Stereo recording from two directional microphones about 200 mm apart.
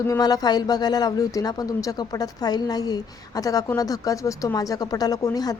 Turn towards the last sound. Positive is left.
turn(degrees=20)  # may be behind; listen again after turning